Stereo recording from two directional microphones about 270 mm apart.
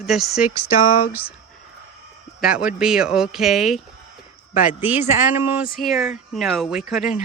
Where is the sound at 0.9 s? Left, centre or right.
Left.